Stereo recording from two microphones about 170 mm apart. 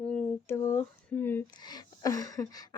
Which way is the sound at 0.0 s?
5° left (ahead or behind).